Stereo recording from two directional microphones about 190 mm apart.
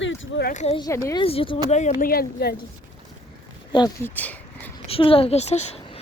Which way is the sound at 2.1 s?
55° left (ahead or behind).